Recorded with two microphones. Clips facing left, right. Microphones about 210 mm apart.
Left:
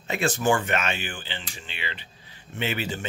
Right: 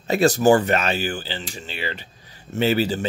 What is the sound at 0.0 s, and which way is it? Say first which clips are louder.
Speech: right 8 dB; 40° right (ahead or behind).